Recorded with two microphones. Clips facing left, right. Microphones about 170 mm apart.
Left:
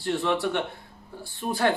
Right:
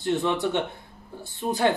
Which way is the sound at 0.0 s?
20° right (ahead or behind).